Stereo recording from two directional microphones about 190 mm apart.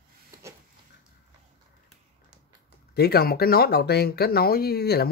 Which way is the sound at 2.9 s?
55° left (ahead or behind).